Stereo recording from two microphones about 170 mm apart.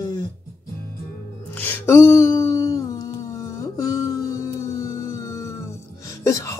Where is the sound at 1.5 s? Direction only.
10° left (ahead or behind).